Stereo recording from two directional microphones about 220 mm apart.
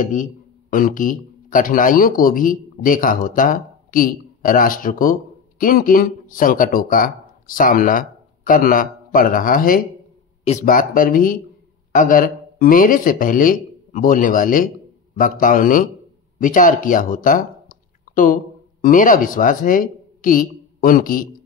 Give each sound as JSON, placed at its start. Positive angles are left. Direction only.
{"t": 0.0, "sound": "a man's voice", "side_deg": 35}